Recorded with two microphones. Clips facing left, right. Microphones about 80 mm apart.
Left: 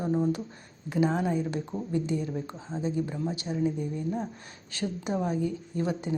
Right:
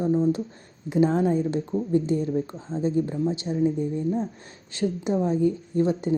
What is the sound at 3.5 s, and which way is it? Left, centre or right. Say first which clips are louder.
Speech: right 5 dB; left.